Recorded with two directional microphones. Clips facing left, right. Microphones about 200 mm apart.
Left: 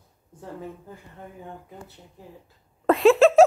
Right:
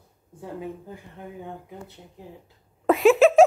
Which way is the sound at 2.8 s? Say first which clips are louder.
Even; centre (ahead or behind).